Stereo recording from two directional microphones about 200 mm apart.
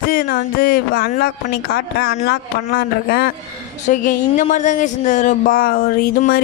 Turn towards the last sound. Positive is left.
turn(degrees=45)  # may be behind; listen again after turning